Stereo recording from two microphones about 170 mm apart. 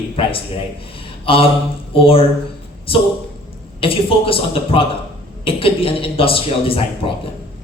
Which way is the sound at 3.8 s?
35° left (ahead or behind).